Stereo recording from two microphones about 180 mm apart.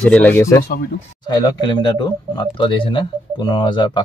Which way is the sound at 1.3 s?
25° left (ahead or behind).